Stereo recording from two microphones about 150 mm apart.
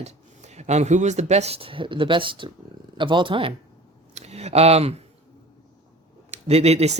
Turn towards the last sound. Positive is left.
turn(degrees=-45)  # may be behind; listen again after turning